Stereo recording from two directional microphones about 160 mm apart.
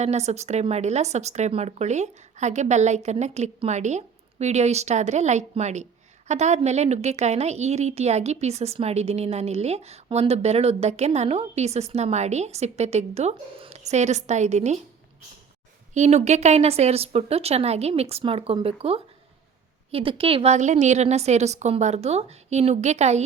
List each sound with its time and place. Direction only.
0.0 s speech: 45° right (ahead or behind)
16.0 s a woman's voice: 45° right (ahead or behind)